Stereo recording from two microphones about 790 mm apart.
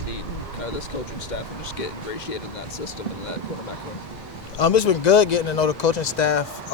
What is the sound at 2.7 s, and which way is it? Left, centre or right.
Speech, left.